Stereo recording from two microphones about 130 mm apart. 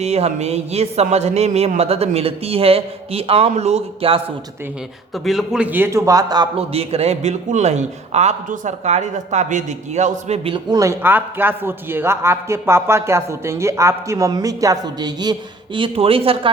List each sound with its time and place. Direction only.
0.0 s a man's voice: 55° right (ahead or behind)
5.1 s a man's voice: centre (ahead or behind); by 6.5 s 30° right (ahead or behind)
6.6 s a man's voice: 50° right (ahead or behind)
10.7 s a man's voice: 25° right (ahead or behind); by 16.5 s 45° right (ahead or behind)